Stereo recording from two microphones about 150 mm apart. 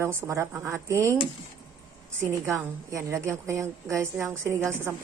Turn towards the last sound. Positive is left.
turn(degrees=-15)  # may be behind; listen again after turning